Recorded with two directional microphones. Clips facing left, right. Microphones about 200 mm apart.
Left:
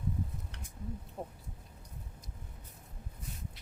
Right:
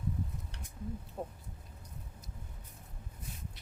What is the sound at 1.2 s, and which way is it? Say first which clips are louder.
Speech: right 2 dB; 5° left (ahead or behind).